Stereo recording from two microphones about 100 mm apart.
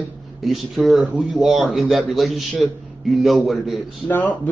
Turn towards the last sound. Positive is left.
turn(degrees=15)  # may be behind; listen again after turning